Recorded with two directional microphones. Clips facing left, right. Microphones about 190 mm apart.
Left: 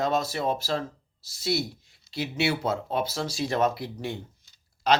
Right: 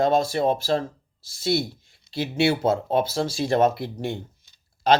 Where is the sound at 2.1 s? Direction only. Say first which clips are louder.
Right 5 dB; 30° right (ahead or behind).